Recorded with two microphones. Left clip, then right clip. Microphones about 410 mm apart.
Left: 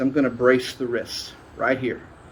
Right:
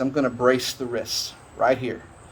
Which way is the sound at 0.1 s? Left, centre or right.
Centre.